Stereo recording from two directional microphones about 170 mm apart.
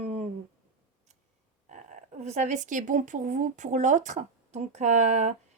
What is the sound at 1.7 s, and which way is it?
Speech, 45° right (ahead or behind).